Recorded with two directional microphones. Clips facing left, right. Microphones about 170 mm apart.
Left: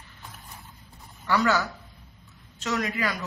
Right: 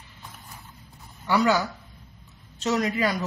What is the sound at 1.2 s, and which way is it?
Speech, 15° right (ahead or behind).